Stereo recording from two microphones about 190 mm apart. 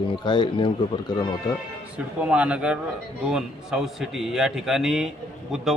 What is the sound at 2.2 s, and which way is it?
A man's voice, 5° right (ahead or behind).